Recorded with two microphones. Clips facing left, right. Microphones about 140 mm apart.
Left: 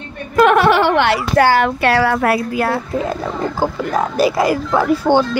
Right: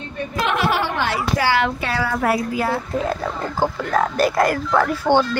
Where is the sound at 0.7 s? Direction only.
75° left (ahead or behind).